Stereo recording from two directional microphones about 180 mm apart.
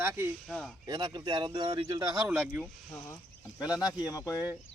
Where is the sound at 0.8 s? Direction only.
20° right (ahead or behind).